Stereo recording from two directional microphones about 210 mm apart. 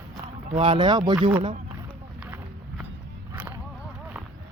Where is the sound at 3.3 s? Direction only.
10° right (ahead or behind).